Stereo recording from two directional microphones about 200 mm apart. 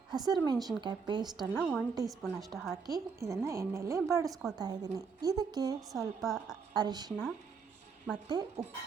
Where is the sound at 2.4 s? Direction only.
Centre (ahead or behind).